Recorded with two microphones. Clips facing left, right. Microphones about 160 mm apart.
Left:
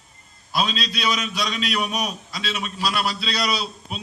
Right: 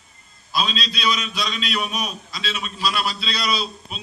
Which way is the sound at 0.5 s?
60° left (ahead or behind).